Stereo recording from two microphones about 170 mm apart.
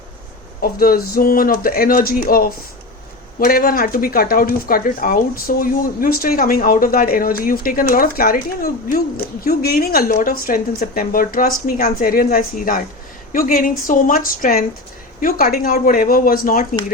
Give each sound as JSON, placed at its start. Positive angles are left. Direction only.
{"t": 0.6, "sound": "a woman's voice", "side_deg": 60}